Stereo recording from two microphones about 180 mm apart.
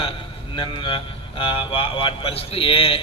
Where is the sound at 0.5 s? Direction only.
25° left (ahead or behind).